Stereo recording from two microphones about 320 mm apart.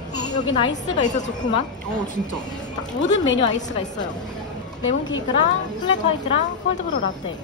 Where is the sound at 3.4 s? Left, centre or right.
Left.